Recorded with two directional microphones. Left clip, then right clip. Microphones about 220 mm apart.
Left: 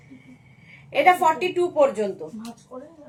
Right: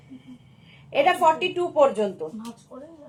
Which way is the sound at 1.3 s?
15° left (ahead or behind).